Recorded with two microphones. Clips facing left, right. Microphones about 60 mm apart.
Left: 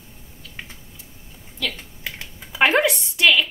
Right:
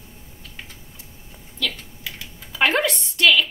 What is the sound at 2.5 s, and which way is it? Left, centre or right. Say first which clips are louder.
Speech: left 2 dB; centre.